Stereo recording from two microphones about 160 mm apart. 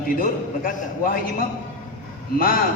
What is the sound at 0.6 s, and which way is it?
Speech, 60° left (ahead or behind).